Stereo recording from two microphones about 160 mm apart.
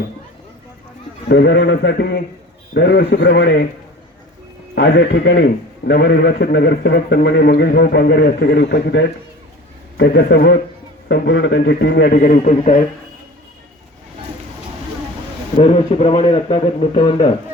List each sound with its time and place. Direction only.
1.3 s a man's voice: 90° left
4.7 s a man's voice: 90° left; by 12.8 s 45° left (ahead or behind)
15.5 s a man's voice: 30° left (ahead or behind)